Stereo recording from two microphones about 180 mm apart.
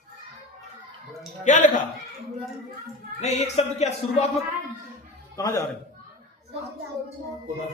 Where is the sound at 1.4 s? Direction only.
45° left (ahead or behind).